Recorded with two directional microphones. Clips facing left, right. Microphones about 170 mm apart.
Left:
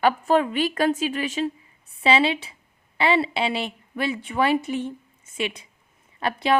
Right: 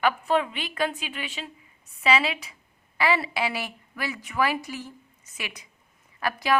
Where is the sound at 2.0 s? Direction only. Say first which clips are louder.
Left 4 dB; 30° left (ahead or behind).